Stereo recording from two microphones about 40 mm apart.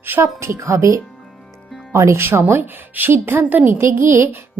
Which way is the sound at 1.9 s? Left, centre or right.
Right.